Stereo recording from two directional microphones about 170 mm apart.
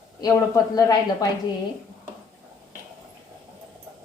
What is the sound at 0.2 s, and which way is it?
A woman's voice, 20° left (ahead or behind).